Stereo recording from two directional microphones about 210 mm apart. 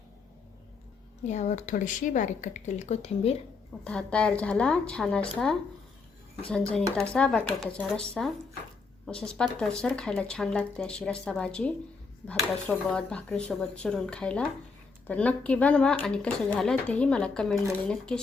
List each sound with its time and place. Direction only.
1.3 s speech: 35° left (ahead or behind)
3.8 s speech: 5° left (ahead or behind)
6.4 s speech: 5° left (ahead or behind)